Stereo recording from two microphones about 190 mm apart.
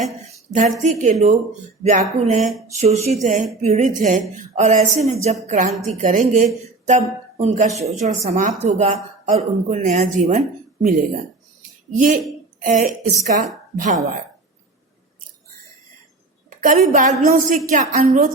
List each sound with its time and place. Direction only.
0.5 s a woman's voice: 40° right (ahead or behind)
16.6 s a woman's voice: 45° right (ahead or behind)